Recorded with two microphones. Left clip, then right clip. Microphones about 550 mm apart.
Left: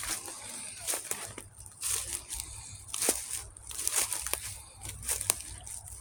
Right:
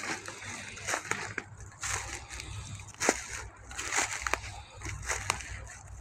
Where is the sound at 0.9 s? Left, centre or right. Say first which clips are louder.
Right 6 dB; left.